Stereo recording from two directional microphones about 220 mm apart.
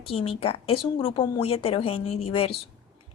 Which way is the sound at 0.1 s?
25° left (ahead or behind).